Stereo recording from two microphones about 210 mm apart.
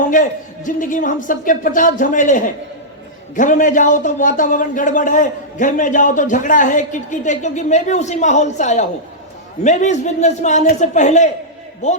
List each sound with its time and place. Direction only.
0.1 s speech: 40° left (ahead or behind)